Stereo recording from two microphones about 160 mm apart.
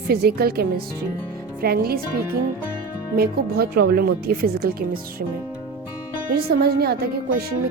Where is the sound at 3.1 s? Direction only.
70° right (ahead or behind).